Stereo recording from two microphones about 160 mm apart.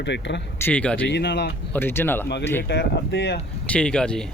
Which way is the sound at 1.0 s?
90° left.